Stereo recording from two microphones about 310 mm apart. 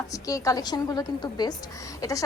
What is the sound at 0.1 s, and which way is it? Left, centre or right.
Speech, centre.